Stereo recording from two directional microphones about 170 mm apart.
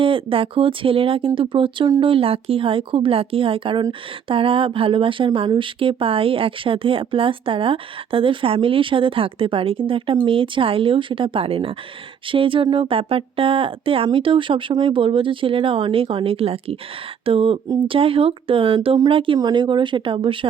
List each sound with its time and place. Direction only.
0.0 s speech: 30° right (ahead or behind)